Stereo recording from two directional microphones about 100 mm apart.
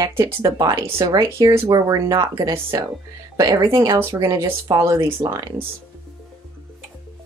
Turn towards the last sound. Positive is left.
turn(degrees=-35)  # may be behind; listen again after turning